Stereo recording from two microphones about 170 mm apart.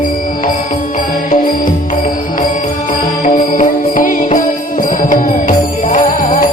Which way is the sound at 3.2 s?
50° left (ahead or behind).